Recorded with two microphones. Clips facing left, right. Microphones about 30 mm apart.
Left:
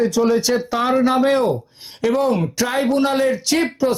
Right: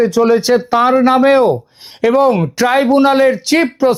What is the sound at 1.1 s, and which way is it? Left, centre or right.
Speech, centre.